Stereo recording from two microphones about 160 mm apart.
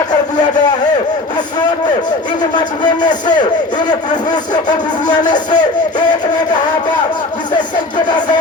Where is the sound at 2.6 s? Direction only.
25° left (ahead or behind).